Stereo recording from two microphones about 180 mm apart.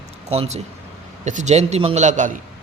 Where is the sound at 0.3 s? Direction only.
35° right (ahead or behind).